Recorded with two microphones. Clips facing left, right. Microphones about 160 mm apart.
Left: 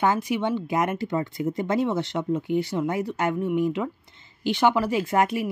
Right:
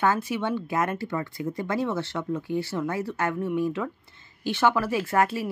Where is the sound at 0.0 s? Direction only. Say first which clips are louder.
Left 2 dB; 15° left (ahead or behind).